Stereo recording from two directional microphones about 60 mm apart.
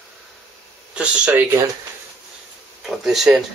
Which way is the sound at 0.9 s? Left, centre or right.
Centre.